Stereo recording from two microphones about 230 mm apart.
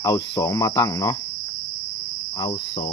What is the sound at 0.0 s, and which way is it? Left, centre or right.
Cricket, centre.